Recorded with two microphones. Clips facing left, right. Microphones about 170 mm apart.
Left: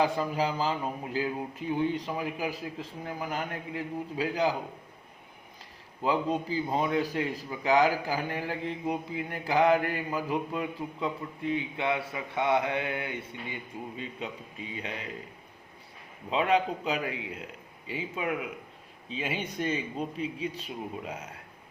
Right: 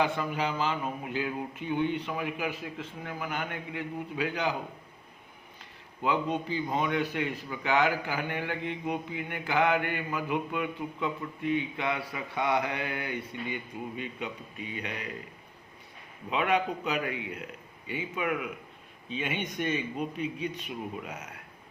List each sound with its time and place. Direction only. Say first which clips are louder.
0.0 s speech: left 2 dB; 35° left (ahead or behind)
6.5 s speech: left 1 dB; 35° left (ahead or behind)
8.4 s mantra: left 1 dB; 35° left (ahead or behind)
16.3 s mantra: left 2 dB; 30° left (ahead or behind)
19.1 s speech: even; 30° left (ahead or behind)